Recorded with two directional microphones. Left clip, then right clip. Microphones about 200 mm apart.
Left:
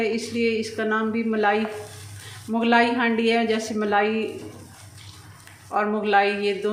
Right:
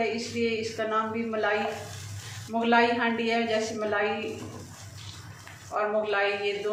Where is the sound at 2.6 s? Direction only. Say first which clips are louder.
Left 3 dB; 55° left (ahead or behind).